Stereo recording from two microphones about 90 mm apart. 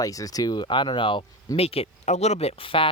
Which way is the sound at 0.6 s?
65° left (ahead or behind).